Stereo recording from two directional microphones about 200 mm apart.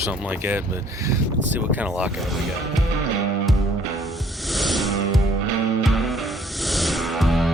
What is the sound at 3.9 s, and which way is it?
Music, centre (ahead or behind).